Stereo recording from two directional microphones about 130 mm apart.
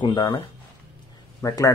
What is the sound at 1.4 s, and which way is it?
Speech, 25° left (ahead or behind).